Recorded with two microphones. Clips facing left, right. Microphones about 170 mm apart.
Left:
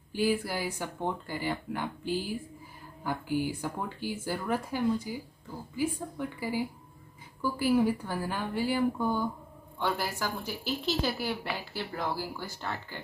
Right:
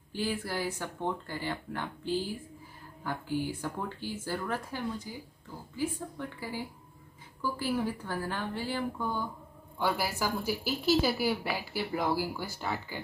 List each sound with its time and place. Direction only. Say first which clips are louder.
0.1 s speech: left 5 dB; 10° left (ahead or behind)
9.8 s a woman's voice: right 1 dB; 5° right (ahead or behind)